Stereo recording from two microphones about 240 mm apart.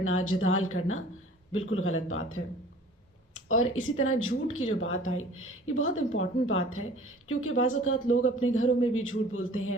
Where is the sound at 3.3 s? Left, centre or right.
Left.